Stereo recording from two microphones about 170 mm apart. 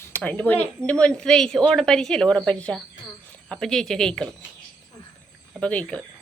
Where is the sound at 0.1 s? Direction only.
10° left (ahead or behind).